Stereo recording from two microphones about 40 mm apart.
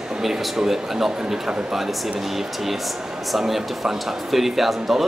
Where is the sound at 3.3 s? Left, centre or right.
Centre.